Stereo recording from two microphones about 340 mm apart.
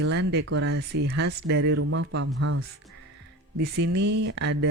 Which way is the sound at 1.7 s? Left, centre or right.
Right.